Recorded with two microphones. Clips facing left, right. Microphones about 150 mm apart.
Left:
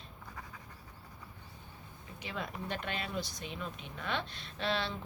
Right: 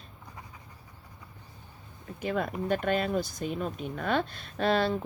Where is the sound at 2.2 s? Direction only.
50° right (ahead or behind).